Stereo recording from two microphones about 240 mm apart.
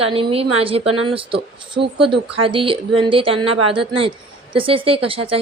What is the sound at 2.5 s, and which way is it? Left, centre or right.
Speech, right.